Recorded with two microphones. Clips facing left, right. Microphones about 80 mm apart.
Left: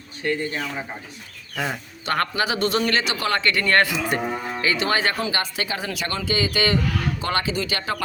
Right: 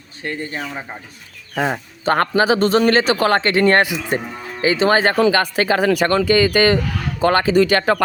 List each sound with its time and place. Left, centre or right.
0.2 s a man's voice: right
5.3 s speech: right
7.6 s speech: right